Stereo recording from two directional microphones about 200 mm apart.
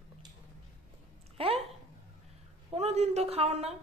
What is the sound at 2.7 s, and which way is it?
A woman's voice, 30° right (ahead or behind).